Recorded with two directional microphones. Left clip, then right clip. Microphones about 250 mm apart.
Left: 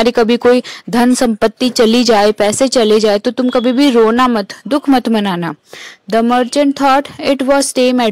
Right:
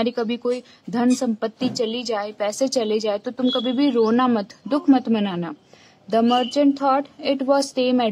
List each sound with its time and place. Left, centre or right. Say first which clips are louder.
0.0 s speech: left 13 dB; left